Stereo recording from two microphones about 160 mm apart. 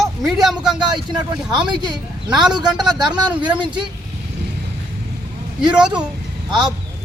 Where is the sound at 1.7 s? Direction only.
25° right (ahead or behind).